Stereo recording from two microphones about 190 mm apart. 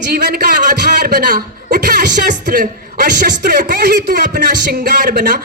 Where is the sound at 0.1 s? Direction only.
55° right (ahead or behind).